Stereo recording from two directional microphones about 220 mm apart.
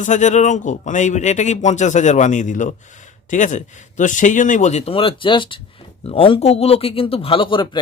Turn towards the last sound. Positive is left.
turn(degrees=20)  # may be behind; listen again after turning